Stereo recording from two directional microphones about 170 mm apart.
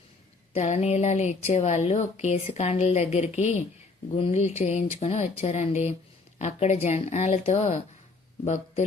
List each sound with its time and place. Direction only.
0.5 s speech: 40° left (ahead or behind)